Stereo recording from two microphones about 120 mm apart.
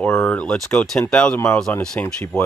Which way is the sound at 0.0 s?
10° left (ahead or behind).